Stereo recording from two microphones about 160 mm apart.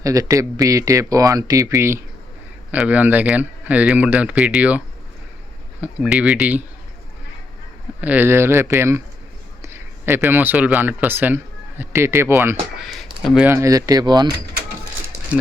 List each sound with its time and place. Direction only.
0.0 s speech: 20° right (ahead or behind)
5.8 s speech: 5° right (ahead or behind)
8.0 s speech: 10° right (ahead or behind)
12.8 s speech: centre (ahead or behind)
13.5 s speech: 20° right (ahead or behind)
15.3 s speech: 10° right (ahead or behind)